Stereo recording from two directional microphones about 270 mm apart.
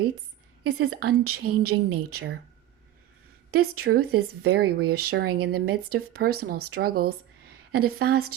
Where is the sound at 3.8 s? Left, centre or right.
Right.